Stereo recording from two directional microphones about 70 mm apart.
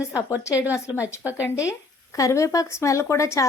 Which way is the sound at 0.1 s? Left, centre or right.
Left.